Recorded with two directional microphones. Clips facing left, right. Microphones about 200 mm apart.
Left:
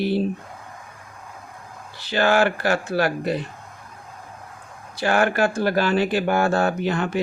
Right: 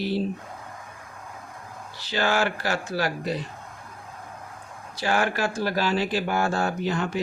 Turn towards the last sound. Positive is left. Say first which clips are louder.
# left 3 dB
turn(degrees=60)  # may be behind; listen again after turning